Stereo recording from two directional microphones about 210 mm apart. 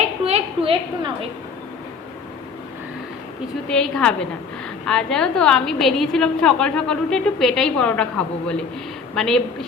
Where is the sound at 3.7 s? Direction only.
5° left (ahead or behind).